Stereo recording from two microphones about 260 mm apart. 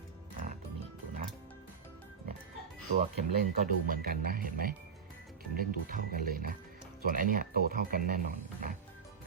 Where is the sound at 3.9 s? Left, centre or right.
Right.